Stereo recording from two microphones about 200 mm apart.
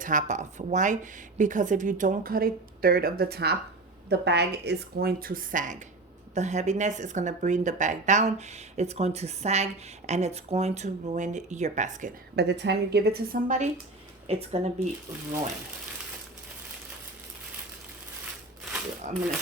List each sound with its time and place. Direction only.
0.0 s a woman's voice: 40° right (ahead or behind)
12.4 s a woman's voice: 60° right (ahead or behind); by 13.7 s 45° right (ahead or behind)
14.3 s speech: 30° right (ahead or behind)